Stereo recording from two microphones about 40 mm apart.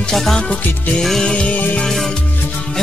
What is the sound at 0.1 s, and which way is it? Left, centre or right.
Music, centre.